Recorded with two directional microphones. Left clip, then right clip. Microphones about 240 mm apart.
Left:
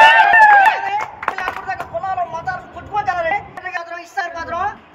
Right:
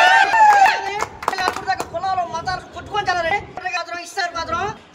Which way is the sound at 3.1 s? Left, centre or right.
Centre.